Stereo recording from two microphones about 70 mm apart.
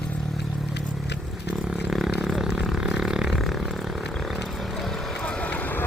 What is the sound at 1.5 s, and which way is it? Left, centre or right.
Vehicle, centre.